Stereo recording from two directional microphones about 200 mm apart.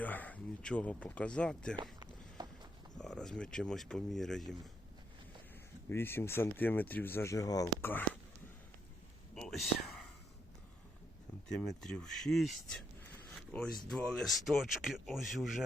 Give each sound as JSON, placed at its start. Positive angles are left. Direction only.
{"t": 0.0, "sound": "speech", "side_deg": 10}
{"t": 1.7, "sound": "a sound", "side_deg": -20}
{"t": 3.0, "sound": "speech", "side_deg": 5}
{"t": 5.9, "sound": "speech", "side_deg": 10}
{"t": 9.3, "sound": "whispering", "side_deg": 0}
{"t": 11.8, "sound": "speech", "side_deg": 5}